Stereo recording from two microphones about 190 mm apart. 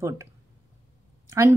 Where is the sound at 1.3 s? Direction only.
15° right (ahead or behind).